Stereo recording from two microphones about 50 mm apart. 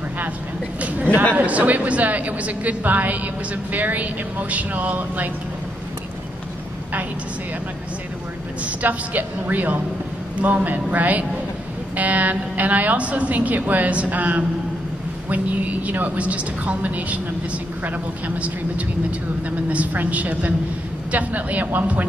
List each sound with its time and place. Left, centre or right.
0.7 s a sound: right
1.3 s a woman's voice: right
8.6 s a woman's voice: right
15.9 s a woman's voice: right
19.7 s a woman's voice: right